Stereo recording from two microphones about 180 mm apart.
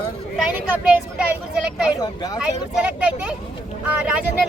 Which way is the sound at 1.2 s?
5° right (ahead or behind).